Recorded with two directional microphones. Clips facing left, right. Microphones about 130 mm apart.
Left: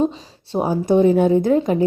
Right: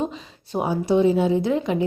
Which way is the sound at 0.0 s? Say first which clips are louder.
Left 7 dB; 35° left (ahead or behind).